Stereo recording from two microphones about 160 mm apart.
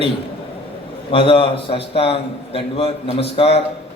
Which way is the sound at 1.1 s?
35° left (ahead or behind).